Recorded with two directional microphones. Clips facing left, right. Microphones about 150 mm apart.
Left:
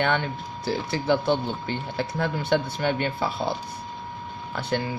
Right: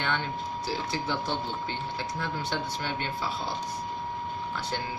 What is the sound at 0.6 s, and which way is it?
Speech, 60° left (ahead or behind).